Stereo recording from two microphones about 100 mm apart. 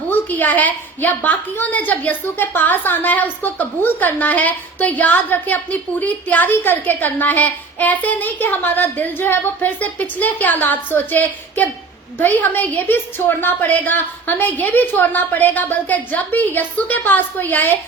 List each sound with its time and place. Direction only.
0.1 s a woman's voice: 20° left (ahead or behind)